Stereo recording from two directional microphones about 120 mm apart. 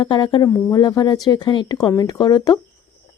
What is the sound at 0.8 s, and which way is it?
Speech, 35° left (ahead or behind).